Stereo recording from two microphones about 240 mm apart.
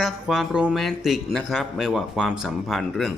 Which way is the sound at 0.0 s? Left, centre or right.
Centre.